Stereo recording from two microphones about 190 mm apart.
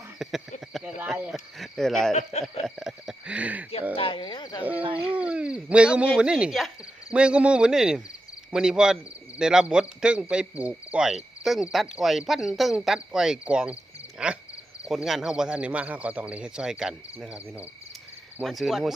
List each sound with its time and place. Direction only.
0.2 s a sound: centre (ahead or behind)
2.6 s speech: centre (ahead or behind)
3.9 s speech: 25° left (ahead or behind)
4.8 s speech: 25° right (ahead or behind)
5.1 s speech: 5° right (ahead or behind)